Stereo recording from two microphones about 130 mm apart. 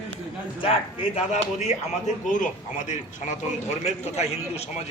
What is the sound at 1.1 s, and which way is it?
Speech, 60° left (ahead or behind).